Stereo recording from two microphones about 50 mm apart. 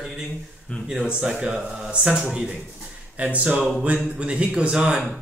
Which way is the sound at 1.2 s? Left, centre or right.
Centre.